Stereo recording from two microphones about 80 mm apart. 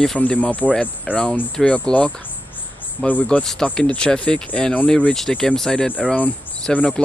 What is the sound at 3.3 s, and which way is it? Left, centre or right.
Speech, centre.